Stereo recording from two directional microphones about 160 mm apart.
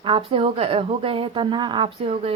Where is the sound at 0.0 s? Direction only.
35° right (ahead or behind).